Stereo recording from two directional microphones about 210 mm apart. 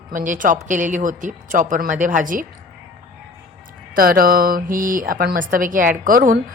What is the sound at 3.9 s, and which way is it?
A woman's voice, 45° right (ahead or behind).